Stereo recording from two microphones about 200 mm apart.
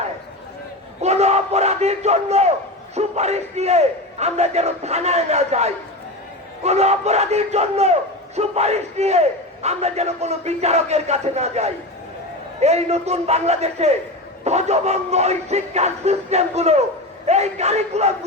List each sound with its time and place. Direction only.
1.0 s battle cry: 35° right (ahead or behind)
2.9 s a man's voice: 35° right (ahead or behind)